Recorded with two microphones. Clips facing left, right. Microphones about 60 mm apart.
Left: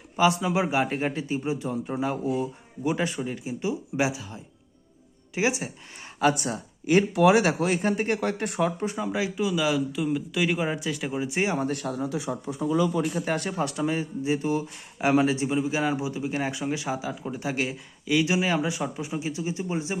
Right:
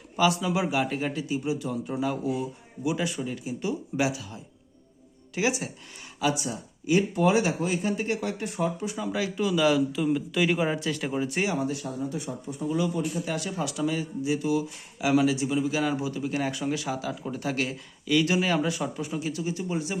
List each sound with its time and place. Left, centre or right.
0.2 s speech: left
3.2 s speech: left
6.1 s speech: left
7.1 s speech: left
8.8 s speech: left
9.4 s speech: centre
11.3 s speech: left
11.7 s speech: left
13.2 s speech: left